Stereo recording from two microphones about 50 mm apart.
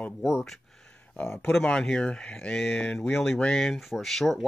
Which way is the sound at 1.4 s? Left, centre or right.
Left.